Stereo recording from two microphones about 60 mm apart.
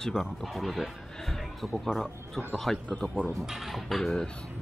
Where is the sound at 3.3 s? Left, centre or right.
Centre.